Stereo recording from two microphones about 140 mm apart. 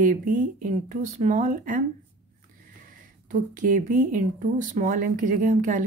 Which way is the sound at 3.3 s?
65° right (ahead or behind).